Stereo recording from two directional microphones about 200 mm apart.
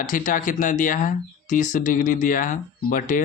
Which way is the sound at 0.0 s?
40° left (ahead or behind).